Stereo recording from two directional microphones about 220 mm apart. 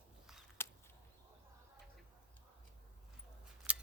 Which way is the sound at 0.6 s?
10° left (ahead or behind).